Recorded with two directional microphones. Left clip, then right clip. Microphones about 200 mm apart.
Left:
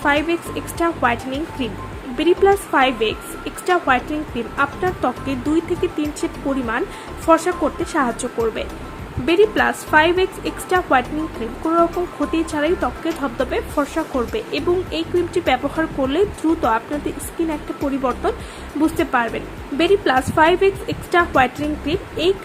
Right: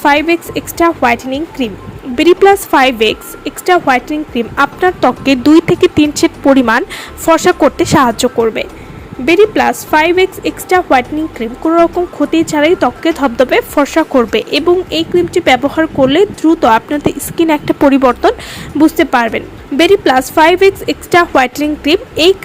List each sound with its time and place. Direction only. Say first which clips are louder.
0.0 s a woman's voice: right 8 dB; 40° right (ahead or behind)
9.2 s a woman's voice: right 7 dB; 30° right (ahead or behind)